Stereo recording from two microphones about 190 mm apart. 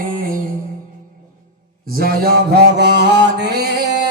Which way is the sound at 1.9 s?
55° right (ahead or behind).